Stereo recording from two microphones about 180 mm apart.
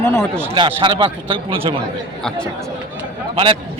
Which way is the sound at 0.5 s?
25° right (ahead or behind).